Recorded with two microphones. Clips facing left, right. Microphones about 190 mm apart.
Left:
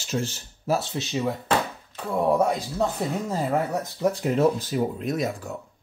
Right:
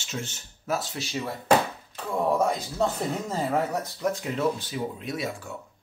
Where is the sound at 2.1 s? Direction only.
10° left (ahead or behind).